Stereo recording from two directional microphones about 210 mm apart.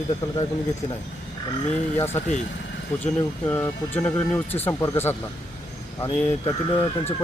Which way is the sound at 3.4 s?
10° left (ahead or behind).